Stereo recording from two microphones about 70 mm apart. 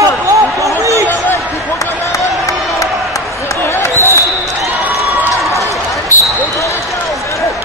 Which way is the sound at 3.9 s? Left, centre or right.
Right.